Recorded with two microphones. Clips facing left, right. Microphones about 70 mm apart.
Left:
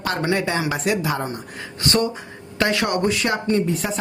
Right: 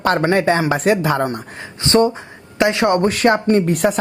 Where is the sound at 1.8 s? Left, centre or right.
Right.